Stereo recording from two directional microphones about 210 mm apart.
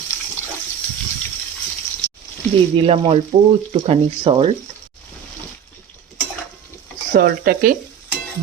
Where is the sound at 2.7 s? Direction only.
25° right (ahead or behind).